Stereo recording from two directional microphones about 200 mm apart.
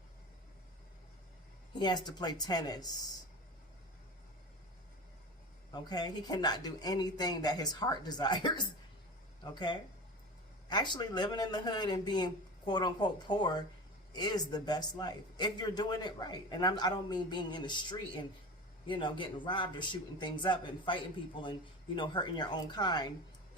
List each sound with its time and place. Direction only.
1.8 s a man's voice: 20° left (ahead or behind)
5.7 s a man's voice: 20° left (ahead or behind)